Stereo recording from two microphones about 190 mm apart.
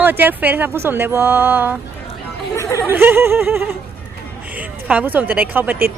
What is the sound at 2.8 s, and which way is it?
Speech, 10° right (ahead or behind).